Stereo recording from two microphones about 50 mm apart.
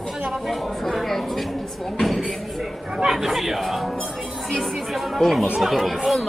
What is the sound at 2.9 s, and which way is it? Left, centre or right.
Speech, centre.